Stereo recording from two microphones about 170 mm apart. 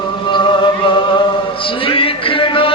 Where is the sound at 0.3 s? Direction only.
30° left (ahead or behind).